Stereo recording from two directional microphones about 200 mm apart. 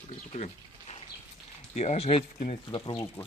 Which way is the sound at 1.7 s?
35° left (ahead or behind).